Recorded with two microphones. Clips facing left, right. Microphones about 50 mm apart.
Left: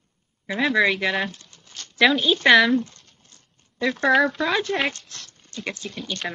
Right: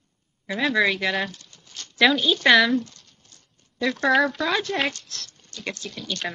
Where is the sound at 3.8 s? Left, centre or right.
Centre.